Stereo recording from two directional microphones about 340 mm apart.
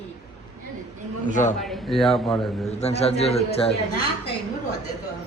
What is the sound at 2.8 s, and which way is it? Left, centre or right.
Speech, centre.